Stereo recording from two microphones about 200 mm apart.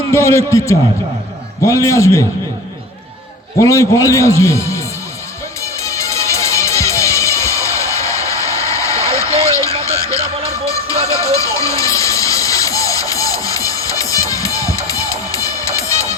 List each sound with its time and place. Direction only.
0.1 s a man's voice: 15° left (ahead or behind)
3.6 s a man's voice: 15° left (ahead or behind)
5.8 s music: 15° left (ahead or behind)